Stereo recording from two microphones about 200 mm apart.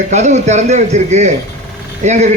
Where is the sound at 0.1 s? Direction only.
35° right (ahead or behind).